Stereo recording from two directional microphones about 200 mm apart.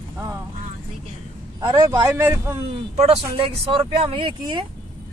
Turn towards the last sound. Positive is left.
turn(degrees=-25)  # may be behind; listen again after turning